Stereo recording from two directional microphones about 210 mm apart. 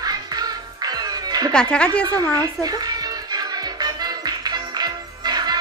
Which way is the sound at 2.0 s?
15° right (ahead or behind).